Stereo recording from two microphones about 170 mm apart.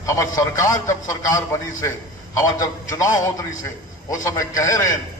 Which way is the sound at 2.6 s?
20° left (ahead or behind).